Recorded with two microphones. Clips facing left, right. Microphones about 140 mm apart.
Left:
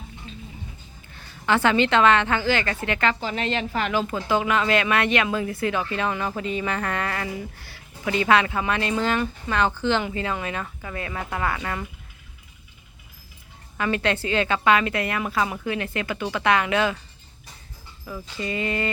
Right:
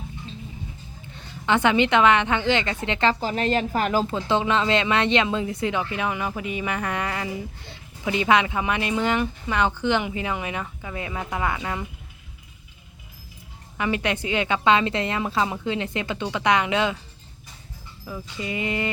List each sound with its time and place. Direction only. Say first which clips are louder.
1.0 s a woman's voice: even; 20° right (ahead or behind)
3.2 s a woman's voice: right 3 dB; 40° right (ahead or behind)
4.0 s speech: right 1 dB; 25° right (ahead or behind)
13.7 s speech: left 1 dB; 15° right (ahead or behind)
18.3 s speech: left 1 dB; 15° right (ahead or behind)